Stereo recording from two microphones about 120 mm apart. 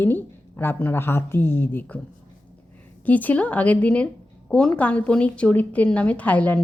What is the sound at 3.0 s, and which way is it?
A woman's voice, 15° left (ahead or behind).